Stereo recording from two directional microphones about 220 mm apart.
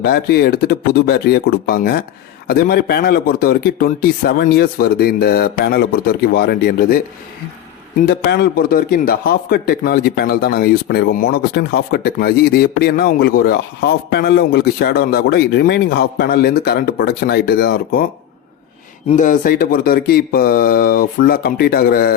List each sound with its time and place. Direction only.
0.0 s a man's voice: 45° left (ahead or behind)
8.0 s a man's voice: 45° left (ahead or behind)
19.0 s speech: 35° left (ahead or behind)